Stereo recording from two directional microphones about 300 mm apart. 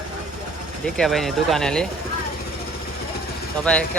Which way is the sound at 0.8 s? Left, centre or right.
Centre.